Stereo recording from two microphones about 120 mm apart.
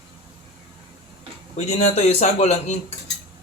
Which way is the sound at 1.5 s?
65° left (ahead or behind).